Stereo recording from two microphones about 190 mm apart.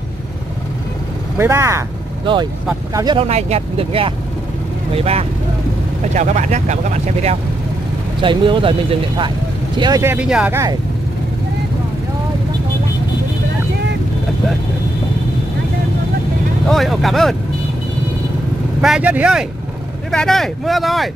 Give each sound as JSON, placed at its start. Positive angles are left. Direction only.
{"t": 1.4, "sound": "speech", "side_deg": -15}
{"t": 2.3, "sound": "speech", "side_deg": -25}
{"t": 3.2, "sound": "speech", "side_deg": -35}
{"t": 8.2, "sound": "speech", "side_deg": -25}
{"t": 10.1, "sound": "speech", "side_deg": -5}
{"t": 16.6, "sound": "speech", "side_deg": 0}
{"t": 18.8, "sound": "speech", "side_deg": -5}